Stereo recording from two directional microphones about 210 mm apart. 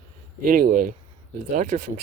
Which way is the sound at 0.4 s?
40° right (ahead or behind).